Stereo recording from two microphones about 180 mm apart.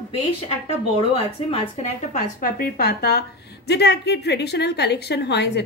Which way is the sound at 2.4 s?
55° left (ahead or behind).